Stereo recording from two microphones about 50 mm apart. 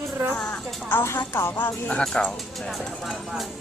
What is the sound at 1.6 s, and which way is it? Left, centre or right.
Speech, left.